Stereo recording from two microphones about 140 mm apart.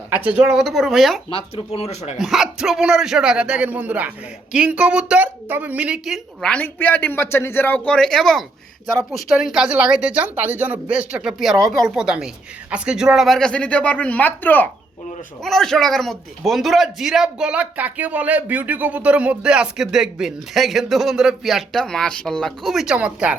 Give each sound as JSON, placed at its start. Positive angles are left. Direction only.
{"t": 0.1, "sound": "a man's voice", "side_deg": -10}
{"t": 1.3, "sound": "speech", "side_deg": 40}
{"t": 2.1, "sound": "a man's voice", "side_deg": -5}